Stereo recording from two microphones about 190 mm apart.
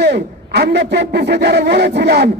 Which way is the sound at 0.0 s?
60° right (ahead or behind).